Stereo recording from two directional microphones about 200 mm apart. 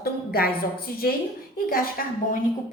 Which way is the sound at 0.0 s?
50° left (ahead or behind).